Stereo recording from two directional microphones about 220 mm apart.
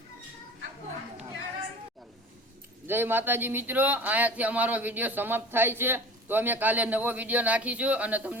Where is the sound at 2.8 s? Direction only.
10° right (ahead or behind).